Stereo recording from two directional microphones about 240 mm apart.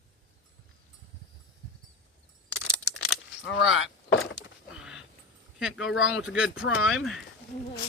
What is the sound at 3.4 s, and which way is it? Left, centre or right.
Vehicle, left.